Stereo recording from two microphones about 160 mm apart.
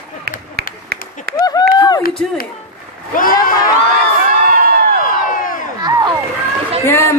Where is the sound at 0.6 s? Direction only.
80° right.